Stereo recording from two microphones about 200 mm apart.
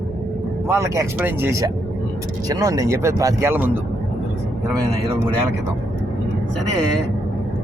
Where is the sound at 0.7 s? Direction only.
15° right (ahead or behind).